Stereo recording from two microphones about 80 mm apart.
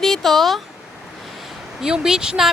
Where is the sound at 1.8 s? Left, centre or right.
Centre.